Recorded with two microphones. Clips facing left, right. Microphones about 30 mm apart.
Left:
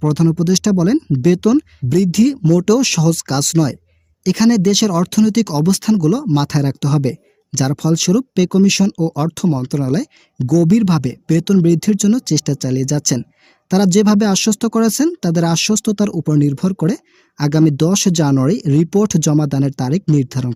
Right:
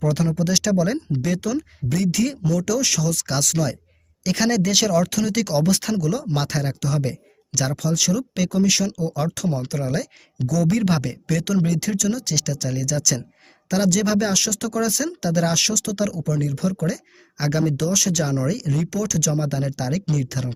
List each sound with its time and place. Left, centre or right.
0.0 s speech: centre
1.4 s speech: left
1.9 s speech: centre
2.6 s speech: left
3.2 s speech: centre
4.2 s speech: centre; by 9.1 s left
9.1 s speech: centre
17.6 s speech: left; by 20.5 s centre